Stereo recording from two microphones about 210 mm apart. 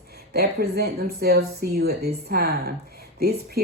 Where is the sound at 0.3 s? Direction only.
50° right (ahead or behind).